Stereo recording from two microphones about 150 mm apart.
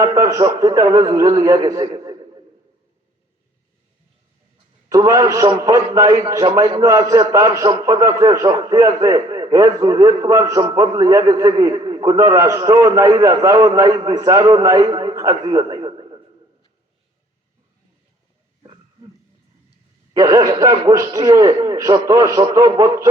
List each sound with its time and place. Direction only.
0.0 s a man's voice: 20° right (ahead or behind)
4.9 s a man's voice: 20° right (ahead or behind)
20.1 s a man's voice: 20° right (ahead or behind)